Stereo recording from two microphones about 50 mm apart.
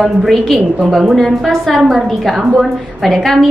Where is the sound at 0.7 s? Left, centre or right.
Centre.